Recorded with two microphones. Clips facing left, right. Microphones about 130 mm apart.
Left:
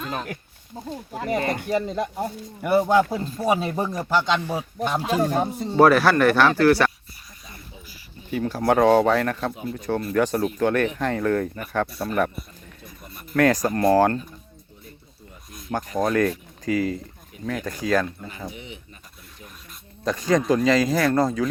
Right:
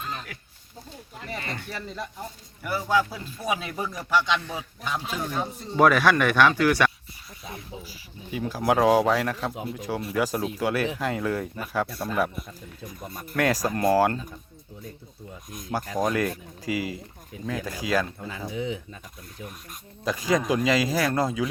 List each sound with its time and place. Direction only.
0.1 s a sound: 55° left (ahead or behind)
1.3 s speech: 50° left (ahead or behind)
5.8 s speech: 5° left (ahead or behind)
8.3 s speech: 10° right (ahead or behind)
13.5 s speech: 15° right (ahead or behind)
16.0 s speech: 10° right (ahead or behind)
20.1 s speech: 5° right (ahead or behind)